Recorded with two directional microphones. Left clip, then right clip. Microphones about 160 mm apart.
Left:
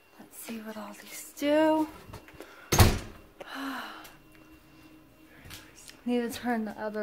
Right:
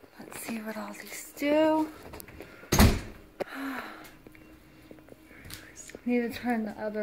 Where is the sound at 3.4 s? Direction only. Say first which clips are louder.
Even; 5° left (ahead or behind).